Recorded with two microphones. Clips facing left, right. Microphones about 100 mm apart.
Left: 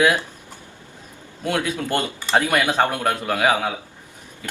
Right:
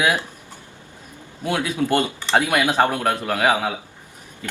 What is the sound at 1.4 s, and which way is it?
A man's voice, 10° right (ahead or behind).